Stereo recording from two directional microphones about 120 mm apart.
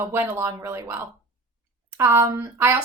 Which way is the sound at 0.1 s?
20° right (ahead or behind).